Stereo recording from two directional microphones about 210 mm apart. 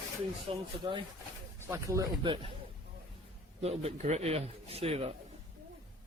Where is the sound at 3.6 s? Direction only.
30° right (ahead or behind).